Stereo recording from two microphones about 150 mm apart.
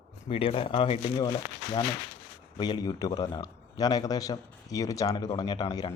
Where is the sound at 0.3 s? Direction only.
35° left (ahead or behind).